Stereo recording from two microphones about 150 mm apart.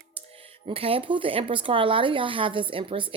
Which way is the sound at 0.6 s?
40° right (ahead or behind).